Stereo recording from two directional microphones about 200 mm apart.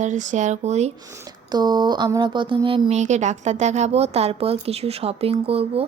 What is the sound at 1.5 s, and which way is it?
Speech, 20° right (ahead or behind).